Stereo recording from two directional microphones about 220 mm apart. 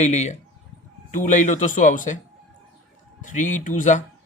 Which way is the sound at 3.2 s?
35° left (ahead or behind).